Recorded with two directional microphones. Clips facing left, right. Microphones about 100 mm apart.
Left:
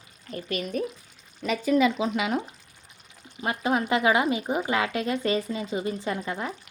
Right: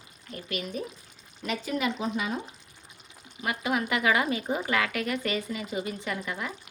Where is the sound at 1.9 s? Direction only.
90° left.